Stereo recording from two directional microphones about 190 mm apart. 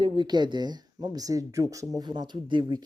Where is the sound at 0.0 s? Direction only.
25° right (ahead or behind).